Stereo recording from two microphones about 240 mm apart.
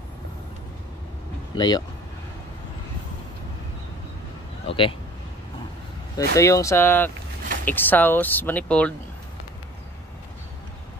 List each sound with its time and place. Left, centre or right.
1.5 s speech: centre
4.6 s speech: left
6.1 s speech: centre